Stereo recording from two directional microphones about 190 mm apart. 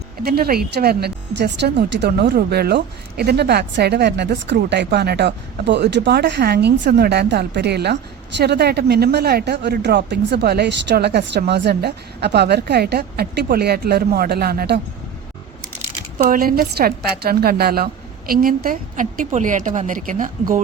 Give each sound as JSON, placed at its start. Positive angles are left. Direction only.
{"t": 0.2, "sound": "speech", "side_deg": -55}
{"t": 16.1, "sound": "a woman's voice", "side_deg": -50}